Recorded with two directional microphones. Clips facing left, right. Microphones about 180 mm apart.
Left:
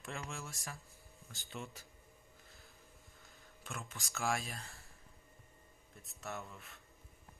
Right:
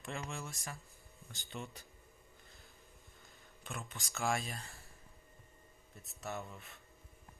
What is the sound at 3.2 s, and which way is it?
Speech, centre (ahead or behind).